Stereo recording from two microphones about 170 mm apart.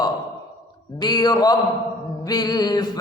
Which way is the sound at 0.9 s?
25° left (ahead or behind).